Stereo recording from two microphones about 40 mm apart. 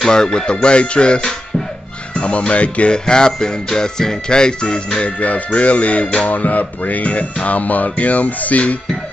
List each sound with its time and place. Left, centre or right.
0.1 s speech: centre
2.1 s music: left
3.1 s speech: centre
5.0 s music: left